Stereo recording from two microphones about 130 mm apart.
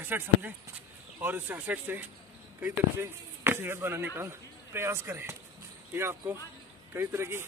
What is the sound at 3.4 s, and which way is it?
Speech, 15° right (ahead or behind).